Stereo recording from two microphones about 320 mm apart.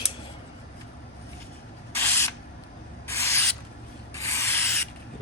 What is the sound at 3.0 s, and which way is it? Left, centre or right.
Rub, centre.